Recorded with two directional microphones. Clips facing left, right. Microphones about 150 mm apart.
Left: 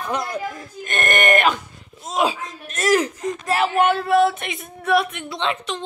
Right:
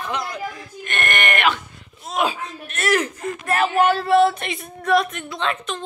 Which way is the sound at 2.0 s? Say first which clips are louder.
Left 1 dB; 30° left (ahead or behind).